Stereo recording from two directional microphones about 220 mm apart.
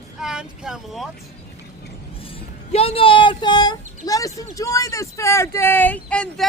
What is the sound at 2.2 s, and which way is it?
Speech, 25° left (ahead or behind).